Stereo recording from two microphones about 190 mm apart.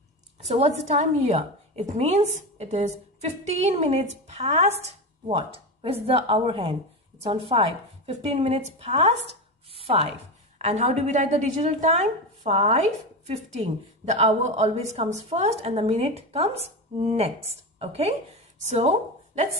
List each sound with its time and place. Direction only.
0.4 s a woman's voice: 35° right (ahead or behind)
9.2 s chopping: 30° right (ahead or behind)
10.6 s a woman's voice: 35° right (ahead or behind)